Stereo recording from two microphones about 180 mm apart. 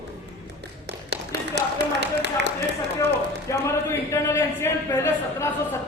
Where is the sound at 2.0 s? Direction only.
75° right (ahead or behind).